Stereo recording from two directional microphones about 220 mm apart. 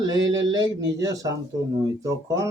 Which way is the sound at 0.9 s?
15° right (ahead or behind).